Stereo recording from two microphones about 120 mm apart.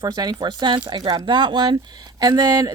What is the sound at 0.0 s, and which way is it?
Speech, 35° right (ahead or behind).